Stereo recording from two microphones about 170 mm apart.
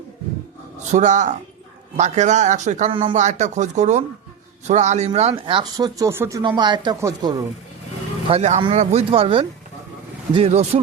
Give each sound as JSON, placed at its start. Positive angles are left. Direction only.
{"t": 0.9, "sound": "speech", "side_deg": -45}
{"t": 2.9, "sound": "speech", "side_deg": -30}
{"t": 3.2, "sound": "speech", "side_deg": -45}
{"t": 5.3, "sound": "speech", "side_deg": -25}
{"t": 8.3, "sound": "speech", "side_deg": -40}